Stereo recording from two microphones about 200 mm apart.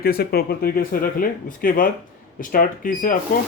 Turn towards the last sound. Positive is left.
turn(degrees=40)  # may be behind; listen again after turning